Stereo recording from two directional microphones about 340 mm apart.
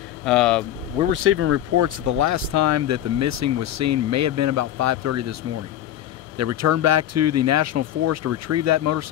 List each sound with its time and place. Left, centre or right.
0.2 s speech: centre
1.1 s speech: right
1.8 s speech: right
6.3 s speech: right